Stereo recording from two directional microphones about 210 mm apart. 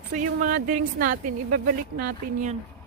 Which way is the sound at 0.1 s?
40° right (ahead or behind).